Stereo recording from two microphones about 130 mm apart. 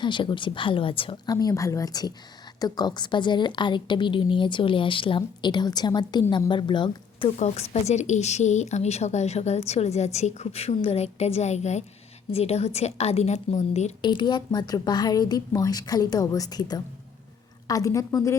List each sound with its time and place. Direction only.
0.0 s a woman's voice: 35° left (ahead or behind)
1.3 s a woman's voice: 30° left (ahead or behind)
7.3 s speech: 55° left (ahead or behind)
14.0 s a woman's voice: 35° left (ahead or behind)